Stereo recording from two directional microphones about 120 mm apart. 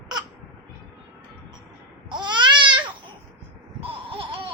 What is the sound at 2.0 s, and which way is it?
Babbling, 40° right (ahead or behind).